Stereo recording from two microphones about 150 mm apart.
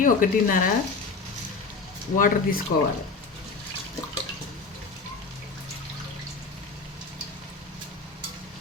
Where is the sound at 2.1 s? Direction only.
70° left (ahead or behind).